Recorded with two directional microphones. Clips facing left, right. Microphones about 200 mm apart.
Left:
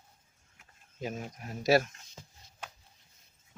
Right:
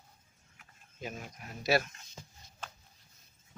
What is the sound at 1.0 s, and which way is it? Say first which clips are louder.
Speech: left 5 dB; 35° left (ahead or behind).